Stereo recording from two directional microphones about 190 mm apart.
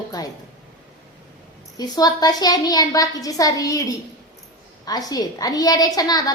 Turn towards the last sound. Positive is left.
turn(degrees=20)  # may be behind; listen again after turning